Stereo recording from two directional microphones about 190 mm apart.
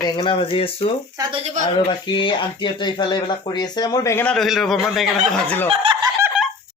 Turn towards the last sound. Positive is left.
turn(degrees=-25)  # may be behind; listen again after turning